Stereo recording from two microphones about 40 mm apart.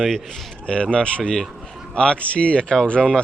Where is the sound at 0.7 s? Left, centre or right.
Left.